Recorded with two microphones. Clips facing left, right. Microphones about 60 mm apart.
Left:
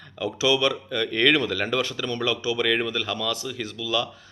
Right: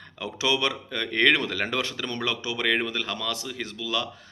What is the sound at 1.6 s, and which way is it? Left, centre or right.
Speech, right.